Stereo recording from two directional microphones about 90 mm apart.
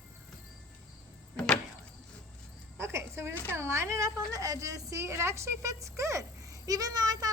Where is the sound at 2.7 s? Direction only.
30° right (ahead or behind).